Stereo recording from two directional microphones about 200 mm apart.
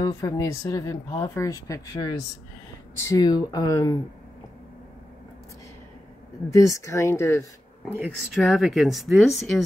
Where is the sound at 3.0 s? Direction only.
15° left (ahead or behind).